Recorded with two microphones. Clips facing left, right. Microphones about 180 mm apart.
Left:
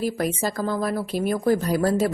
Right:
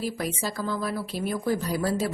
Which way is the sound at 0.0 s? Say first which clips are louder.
Left 5 dB; 50° left (ahead or behind).